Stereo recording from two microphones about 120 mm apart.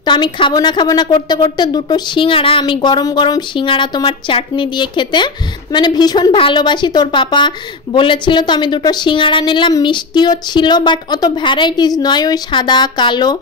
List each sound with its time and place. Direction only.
0.0 s a woman's voice: 40° left (ahead or behind)